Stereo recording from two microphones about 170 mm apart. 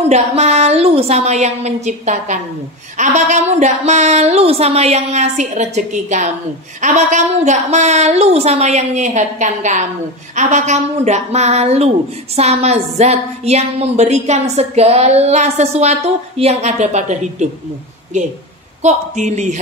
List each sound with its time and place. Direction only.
0.0 s a woman's voice: 40° right (ahead or behind)
18.8 s a woman's voice: 45° right (ahead or behind)